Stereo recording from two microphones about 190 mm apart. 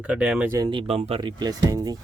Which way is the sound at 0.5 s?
20° right (ahead or behind).